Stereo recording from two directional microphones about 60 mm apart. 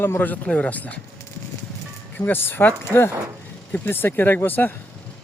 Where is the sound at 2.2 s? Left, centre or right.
Left.